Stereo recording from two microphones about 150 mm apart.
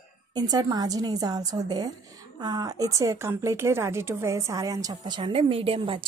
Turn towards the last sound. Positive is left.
turn(degrees=-35)  # may be behind; listen again after turning